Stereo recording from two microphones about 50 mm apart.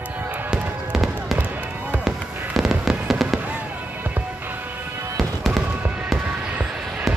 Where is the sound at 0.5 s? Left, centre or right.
Centre.